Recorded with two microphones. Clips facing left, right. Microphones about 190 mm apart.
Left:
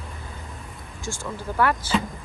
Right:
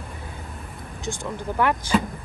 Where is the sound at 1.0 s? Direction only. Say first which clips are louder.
Right 2 dB; 20° right (ahead or behind).